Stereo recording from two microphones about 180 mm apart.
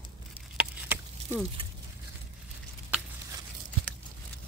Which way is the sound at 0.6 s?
10° right (ahead or behind).